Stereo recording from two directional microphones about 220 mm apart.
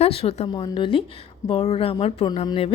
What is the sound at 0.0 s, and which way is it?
A woman's voice, 30° left (ahead or behind).